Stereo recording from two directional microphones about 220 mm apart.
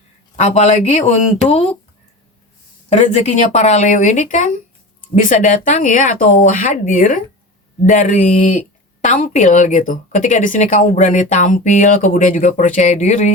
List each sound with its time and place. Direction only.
0.3 s speech: 30° left (ahead or behind)
2.9 s speech: 30° left (ahead or behind)